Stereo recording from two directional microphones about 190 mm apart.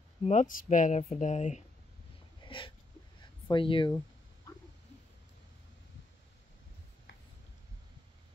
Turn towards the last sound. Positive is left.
turn(degrees=75)  # may be behind; listen again after turning